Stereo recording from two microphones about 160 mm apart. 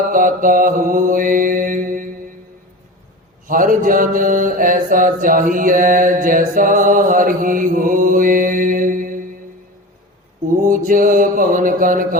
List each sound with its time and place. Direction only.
0.1 s mantra: 55° right (ahead or behind)
3.4 s mantra: 60° right (ahead or behind)
10.7 s mantra: 55° right (ahead or behind)